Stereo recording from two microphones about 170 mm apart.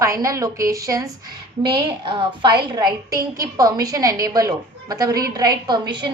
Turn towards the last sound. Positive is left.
turn(degrees=-25)  # may be behind; listen again after turning